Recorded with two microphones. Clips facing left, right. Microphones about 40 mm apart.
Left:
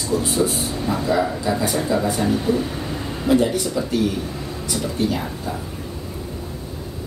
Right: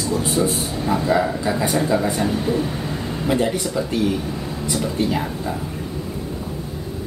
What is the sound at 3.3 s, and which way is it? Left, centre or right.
Speech, right.